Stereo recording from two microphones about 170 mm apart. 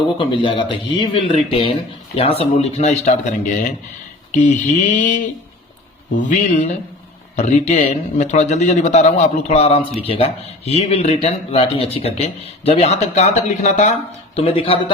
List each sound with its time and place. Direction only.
0.2 s a man's voice: 30° left (ahead or behind)
4.4 s mantra: 45° left (ahead or behind)
7.3 s a man's voice: 45° left (ahead or behind)
14.3 s a man's voice: 35° left (ahead or behind)